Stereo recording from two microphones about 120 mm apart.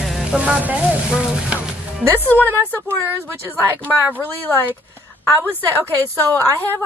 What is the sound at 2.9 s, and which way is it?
Speech, 20° right (ahead or behind).